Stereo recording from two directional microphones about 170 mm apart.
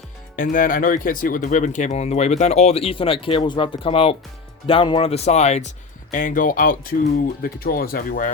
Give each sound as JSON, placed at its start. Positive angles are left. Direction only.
{"t": 0.3, "sound": "speech", "side_deg": 55}